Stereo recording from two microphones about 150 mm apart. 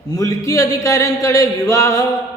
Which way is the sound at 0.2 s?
20° left (ahead or behind).